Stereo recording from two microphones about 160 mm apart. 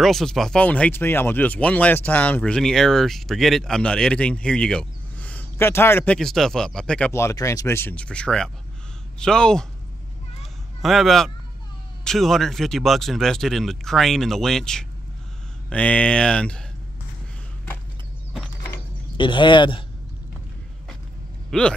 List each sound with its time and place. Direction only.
0.0 s speech: centre (ahead or behind)
6.1 s speech: centre (ahead or behind)
7.1 s speech: 15° left (ahead or behind)
10.8 s speech: centre (ahead or behind)
19.1 s speech: 30° left (ahead or behind)
21.5 s speech: 5° left (ahead or behind)